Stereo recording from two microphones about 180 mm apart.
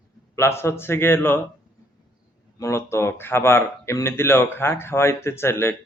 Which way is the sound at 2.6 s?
15° left (ahead or behind).